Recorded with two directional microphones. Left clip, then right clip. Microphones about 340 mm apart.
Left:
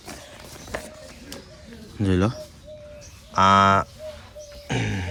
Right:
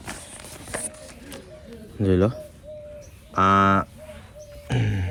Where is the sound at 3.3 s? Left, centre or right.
Centre.